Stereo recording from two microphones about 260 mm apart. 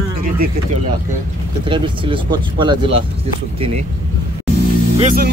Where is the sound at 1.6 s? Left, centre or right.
Centre.